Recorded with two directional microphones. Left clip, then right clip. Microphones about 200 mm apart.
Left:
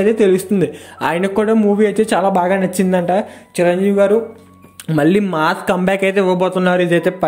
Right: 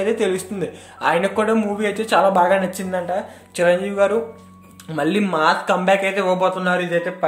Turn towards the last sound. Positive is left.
turn(degrees=45)  # may be behind; listen again after turning